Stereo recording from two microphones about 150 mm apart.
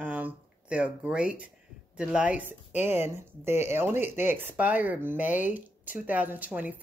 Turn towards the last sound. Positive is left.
turn(degrees=-10)  # may be behind; listen again after turning